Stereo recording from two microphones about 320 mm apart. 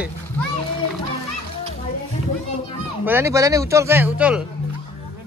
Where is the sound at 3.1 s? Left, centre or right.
Centre.